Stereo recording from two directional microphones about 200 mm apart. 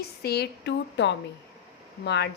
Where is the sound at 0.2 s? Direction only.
55° left (ahead or behind).